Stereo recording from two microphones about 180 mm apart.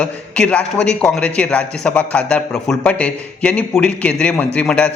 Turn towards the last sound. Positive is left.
turn(degrees=5)  # may be behind; listen again after turning